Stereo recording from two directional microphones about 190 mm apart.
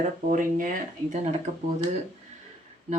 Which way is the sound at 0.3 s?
45° right (ahead or behind).